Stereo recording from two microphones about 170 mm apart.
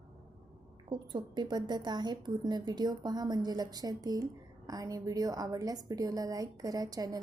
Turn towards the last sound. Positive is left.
turn(degrees=-20)  # may be behind; listen again after turning